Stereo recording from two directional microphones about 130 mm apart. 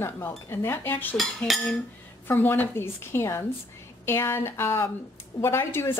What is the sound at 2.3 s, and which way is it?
Speech, 15° left (ahead or behind).